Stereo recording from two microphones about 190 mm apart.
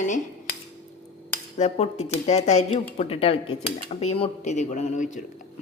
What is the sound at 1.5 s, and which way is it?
Speech, 35° left (ahead or behind).